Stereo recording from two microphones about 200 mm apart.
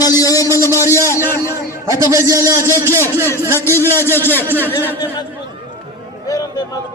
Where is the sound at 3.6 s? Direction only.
10° left (ahead or behind).